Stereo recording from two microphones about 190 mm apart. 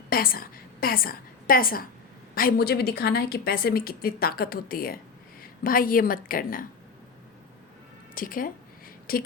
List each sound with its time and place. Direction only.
0.1 s a woman's voice: 50° left (ahead or behind)
8.1 s a woman's voice: 45° left (ahead or behind)